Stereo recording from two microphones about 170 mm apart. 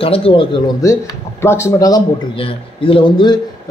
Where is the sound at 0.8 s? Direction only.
15° left (ahead or behind).